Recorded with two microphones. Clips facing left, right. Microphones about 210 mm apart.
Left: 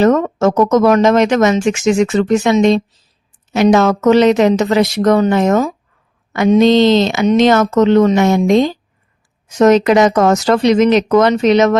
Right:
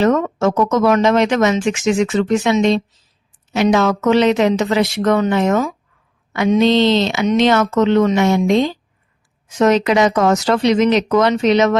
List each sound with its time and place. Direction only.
0.0 s speech: 40° left (ahead or behind)